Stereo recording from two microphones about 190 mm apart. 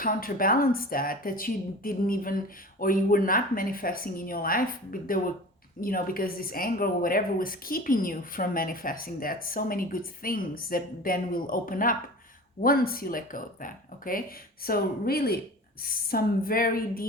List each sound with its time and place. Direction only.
0.0 s a woman's voice: 50° left (ahead or behind)